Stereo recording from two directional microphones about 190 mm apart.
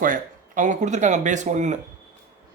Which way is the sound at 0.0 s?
45° right (ahead or behind).